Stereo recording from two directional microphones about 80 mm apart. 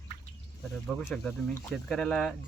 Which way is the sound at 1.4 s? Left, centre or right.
Centre.